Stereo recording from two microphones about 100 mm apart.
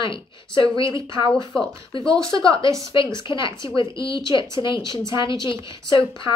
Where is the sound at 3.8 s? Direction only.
55° left (ahead or behind).